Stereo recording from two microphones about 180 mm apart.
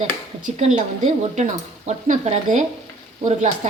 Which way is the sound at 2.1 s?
40° right (ahead or behind).